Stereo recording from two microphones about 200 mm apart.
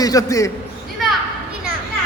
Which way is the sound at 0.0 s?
15° left (ahead or behind).